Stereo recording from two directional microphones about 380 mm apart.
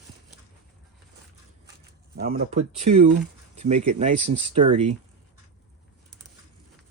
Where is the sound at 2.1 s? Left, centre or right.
Right.